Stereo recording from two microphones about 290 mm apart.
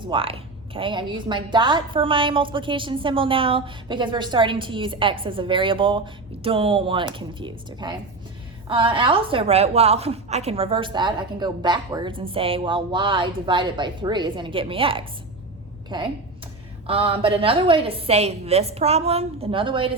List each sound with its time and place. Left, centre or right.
0.1 s a woman's voice: centre